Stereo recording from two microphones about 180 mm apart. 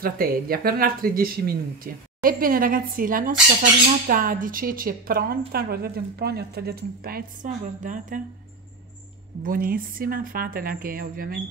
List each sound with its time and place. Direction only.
0.0 s a woman's voice: 55° right (ahead or behind)
9.4 s speech: 50° right (ahead or behind)